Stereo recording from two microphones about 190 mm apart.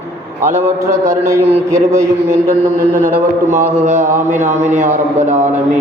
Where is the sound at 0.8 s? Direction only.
15° right (ahead or behind).